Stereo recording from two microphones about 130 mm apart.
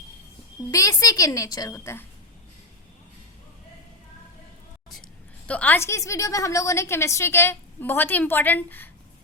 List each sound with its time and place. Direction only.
0.7 s a woman's voice: 25° left (ahead or behind)
5.5 s a woman's voice: 10° left (ahead or behind)